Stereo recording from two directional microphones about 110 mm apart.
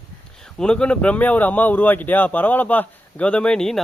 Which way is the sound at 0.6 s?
10° left (ahead or behind).